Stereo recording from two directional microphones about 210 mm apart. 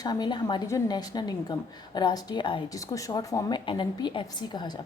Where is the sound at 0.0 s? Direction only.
20° left (ahead or behind).